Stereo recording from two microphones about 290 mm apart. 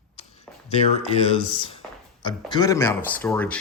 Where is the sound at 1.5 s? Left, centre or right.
Centre.